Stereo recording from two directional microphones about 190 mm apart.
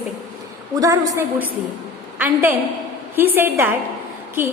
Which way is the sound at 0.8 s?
20° right (ahead or behind).